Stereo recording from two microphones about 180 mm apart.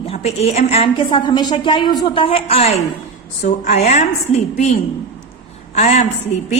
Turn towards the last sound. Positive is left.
turn(degrees=40)  # may be behind; listen again after turning